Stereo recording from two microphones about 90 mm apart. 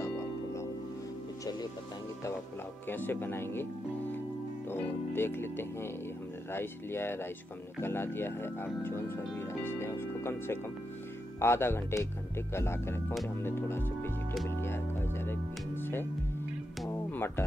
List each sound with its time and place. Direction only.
0.0 s music: 35° left (ahead or behind)
2.9 s speech: 25° left (ahead or behind)
4.6 s speech: 25° left (ahead or behind)
14.6 s music: 25° left (ahead or behind)